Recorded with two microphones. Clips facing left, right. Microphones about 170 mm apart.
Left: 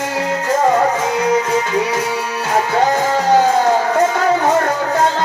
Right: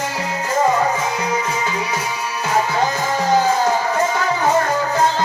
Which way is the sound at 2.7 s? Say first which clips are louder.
Left 5 dB; 65° left (ahead or behind).